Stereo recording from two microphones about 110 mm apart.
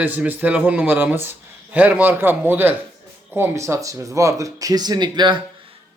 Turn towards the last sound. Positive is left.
turn(degrees=-45)  # may be behind; listen again after turning